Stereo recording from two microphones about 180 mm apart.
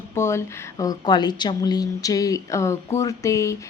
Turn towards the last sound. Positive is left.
turn(degrees=15)  # may be behind; listen again after turning